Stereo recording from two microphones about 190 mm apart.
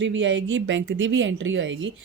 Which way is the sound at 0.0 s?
80° right.